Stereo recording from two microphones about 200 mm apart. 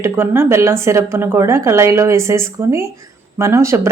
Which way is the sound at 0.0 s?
10° right (ahead or behind).